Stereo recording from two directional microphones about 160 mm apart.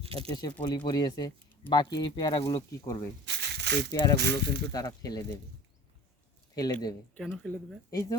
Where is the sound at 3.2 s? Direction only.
90° right.